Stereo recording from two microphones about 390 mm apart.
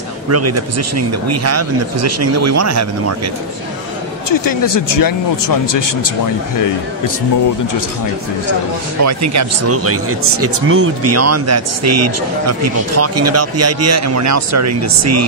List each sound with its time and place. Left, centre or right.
0.3 s speech: right
4.9 s speech: left
9.0 s speech: right